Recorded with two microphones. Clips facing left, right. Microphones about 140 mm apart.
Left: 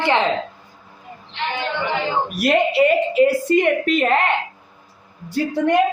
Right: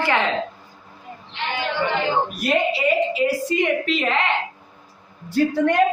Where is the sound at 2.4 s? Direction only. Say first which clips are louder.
Left 7 dB; 65° left (ahead or behind).